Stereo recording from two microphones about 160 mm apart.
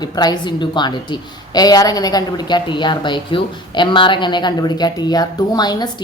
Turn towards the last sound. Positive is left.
turn(degrees=25)  # may be behind; listen again after turning